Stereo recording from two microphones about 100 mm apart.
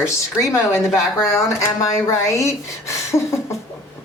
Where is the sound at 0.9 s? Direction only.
Centre (ahead or behind).